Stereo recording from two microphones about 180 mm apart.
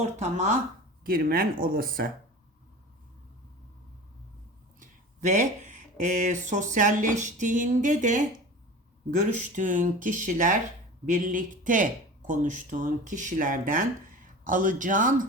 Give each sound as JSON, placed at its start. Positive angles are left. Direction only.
{"t": 0.0, "sound": "speech", "side_deg": -40}
{"t": 1.0, "sound": "speech", "side_deg": -55}
{"t": 4.8, "sound": "speech", "side_deg": -45}